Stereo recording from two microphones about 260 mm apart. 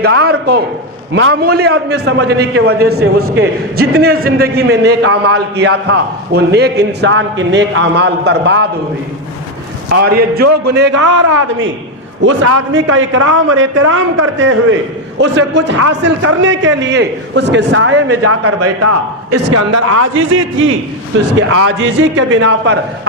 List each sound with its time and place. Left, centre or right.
0.0 s a man's voice: right
10.0 s a man's voice: right